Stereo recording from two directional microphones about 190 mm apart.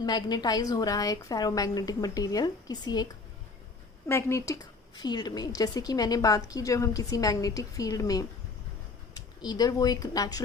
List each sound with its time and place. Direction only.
0.0 s a woman's voice: 20° left (ahead or behind)